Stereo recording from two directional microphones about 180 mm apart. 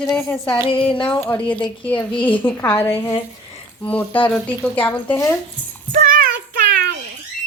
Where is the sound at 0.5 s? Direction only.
30° left (ahead or behind).